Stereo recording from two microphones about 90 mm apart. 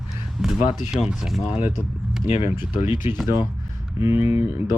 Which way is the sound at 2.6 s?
60° left (ahead or behind).